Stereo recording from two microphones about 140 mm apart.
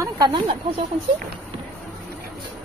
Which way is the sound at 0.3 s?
40° right (ahead or behind).